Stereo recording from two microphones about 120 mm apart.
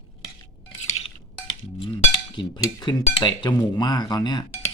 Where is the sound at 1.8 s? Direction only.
45° left (ahead or behind).